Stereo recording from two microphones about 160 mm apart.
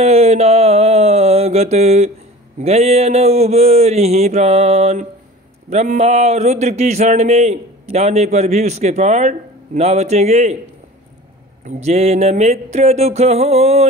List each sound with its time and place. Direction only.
0.0 s a man's voice: 40° right (ahead or behind)
11.6 s speech: 45° right (ahead or behind)